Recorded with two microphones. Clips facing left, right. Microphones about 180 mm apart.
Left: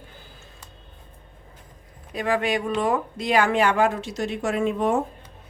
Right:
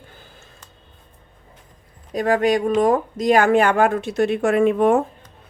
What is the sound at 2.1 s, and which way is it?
A woman's voice, 45° right (ahead or behind).